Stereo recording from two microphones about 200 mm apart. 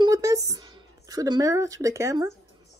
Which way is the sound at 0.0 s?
15° right (ahead or behind).